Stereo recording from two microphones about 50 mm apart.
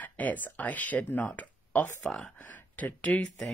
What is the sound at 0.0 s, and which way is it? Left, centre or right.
Speech, left.